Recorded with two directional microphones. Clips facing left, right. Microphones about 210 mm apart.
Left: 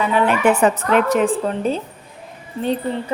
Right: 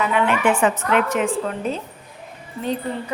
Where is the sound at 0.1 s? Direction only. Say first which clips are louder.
Left 3 dB; 40° left (ahead or behind).